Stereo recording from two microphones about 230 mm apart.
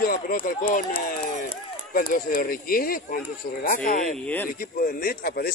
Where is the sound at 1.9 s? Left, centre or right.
Left.